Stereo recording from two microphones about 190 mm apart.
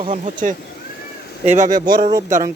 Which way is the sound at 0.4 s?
40° right (ahead or behind).